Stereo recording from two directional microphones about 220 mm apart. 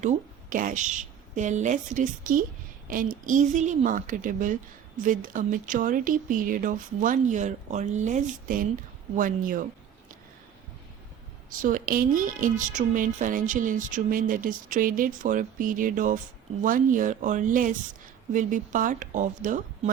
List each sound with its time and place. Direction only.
0.0 s a woman's voice: 35° right (ahead or behind)
11.6 s speech: 40° right (ahead or behind)